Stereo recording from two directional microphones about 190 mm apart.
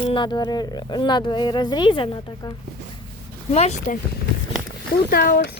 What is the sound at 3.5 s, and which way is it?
Speech, 35° left (ahead or behind).